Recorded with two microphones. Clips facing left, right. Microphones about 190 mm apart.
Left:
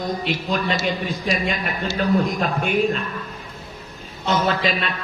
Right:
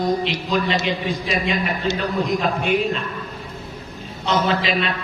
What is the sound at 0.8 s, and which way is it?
A man's voice, 45° left (ahead or behind).